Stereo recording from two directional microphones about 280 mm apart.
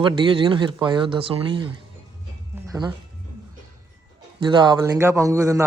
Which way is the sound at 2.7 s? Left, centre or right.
Centre.